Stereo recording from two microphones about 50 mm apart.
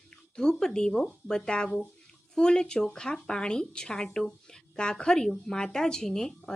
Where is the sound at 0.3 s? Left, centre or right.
Centre.